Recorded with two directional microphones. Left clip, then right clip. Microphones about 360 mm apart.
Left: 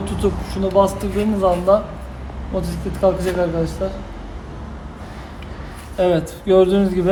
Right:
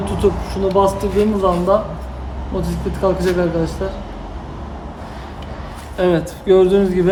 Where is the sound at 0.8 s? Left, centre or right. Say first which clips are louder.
Even; centre.